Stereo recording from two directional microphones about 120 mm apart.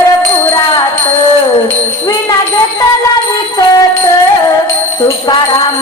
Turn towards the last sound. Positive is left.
turn(degrees=30)  # may be behind; listen again after turning